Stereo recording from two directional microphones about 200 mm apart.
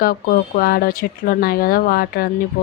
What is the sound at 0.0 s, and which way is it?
Speech, 45° left (ahead or behind).